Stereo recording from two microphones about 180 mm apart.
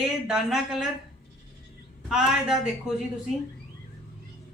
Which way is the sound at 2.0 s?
5° right (ahead or behind).